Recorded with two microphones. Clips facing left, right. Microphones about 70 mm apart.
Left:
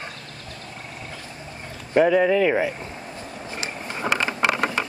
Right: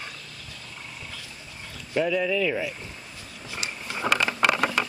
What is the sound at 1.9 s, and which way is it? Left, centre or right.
Speech, left.